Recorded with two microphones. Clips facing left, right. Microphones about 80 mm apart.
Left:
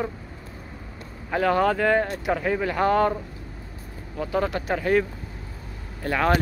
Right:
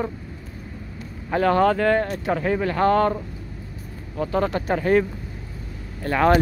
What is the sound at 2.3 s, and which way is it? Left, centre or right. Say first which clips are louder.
Speech: right 3 dB; centre.